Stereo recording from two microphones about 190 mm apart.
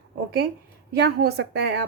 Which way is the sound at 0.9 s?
60° right (ahead or behind).